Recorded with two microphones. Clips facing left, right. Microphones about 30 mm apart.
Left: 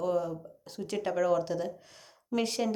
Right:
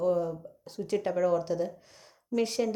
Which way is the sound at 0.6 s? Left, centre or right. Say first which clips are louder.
Right 4 dB; left.